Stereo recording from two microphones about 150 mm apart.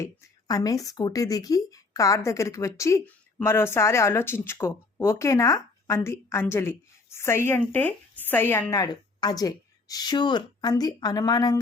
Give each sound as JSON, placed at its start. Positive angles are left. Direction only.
{"t": 0.0, "sound": "speech", "side_deg": 25}